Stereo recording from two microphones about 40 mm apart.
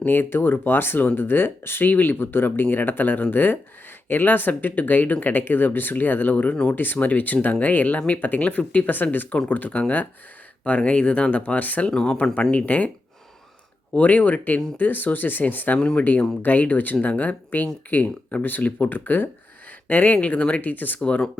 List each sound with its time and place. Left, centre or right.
0.0 s speech: left
1.9 s speech: left
2.6 s speech: left
11.9 s speech: left
12.5 s speech: left
13.9 s speech: left
20.6 s speech: left
21.0 s speech: left